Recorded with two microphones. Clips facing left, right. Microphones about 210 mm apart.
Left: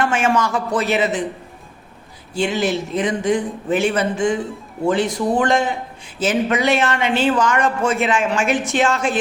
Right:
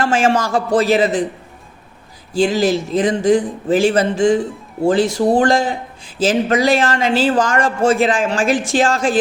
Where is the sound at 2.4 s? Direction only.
35° right (ahead or behind).